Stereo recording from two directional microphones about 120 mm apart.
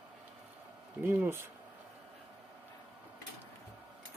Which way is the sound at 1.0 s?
20° right (ahead or behind).